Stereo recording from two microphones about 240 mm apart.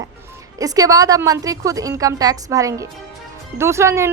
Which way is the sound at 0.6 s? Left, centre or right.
Centre.